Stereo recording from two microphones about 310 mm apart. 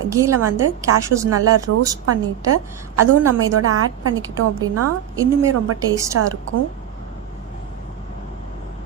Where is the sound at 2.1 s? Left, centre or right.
Right.